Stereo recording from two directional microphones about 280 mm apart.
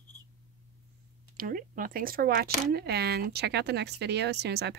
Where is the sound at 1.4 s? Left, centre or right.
Right.